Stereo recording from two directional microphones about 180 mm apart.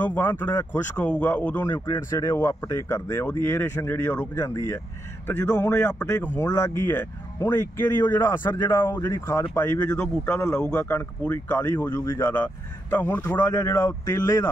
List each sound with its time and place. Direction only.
0.0 s speech: 10° left (ahead or behind)